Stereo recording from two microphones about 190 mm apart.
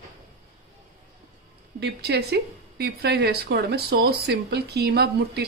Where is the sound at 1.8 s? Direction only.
60° right (ahead or behind).